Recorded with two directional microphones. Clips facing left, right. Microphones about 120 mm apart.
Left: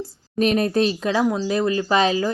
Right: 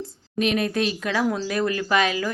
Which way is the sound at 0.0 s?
40° left (ahead or behind).